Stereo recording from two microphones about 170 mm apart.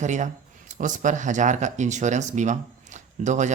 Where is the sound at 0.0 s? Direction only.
45° right (ahead or behind).